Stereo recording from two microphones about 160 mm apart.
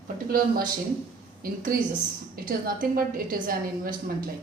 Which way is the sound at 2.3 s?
65° right (ahead or behind).